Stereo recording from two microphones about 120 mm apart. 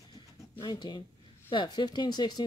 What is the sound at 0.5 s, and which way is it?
Speech, 35° left (ahead or behind).